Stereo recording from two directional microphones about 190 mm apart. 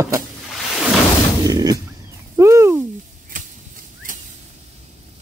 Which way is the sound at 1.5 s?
20° right (ahead or behind).